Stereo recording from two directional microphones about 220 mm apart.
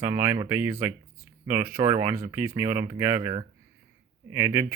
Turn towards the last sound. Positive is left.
turn(degrees=-10)  # may be behind; listen again after turning